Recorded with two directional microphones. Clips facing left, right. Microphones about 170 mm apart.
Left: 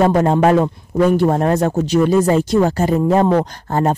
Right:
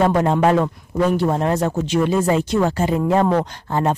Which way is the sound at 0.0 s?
40° left (ahead or behind).